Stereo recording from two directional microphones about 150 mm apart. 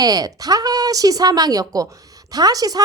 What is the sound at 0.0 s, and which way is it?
Speech, 25° right (ahead or behind).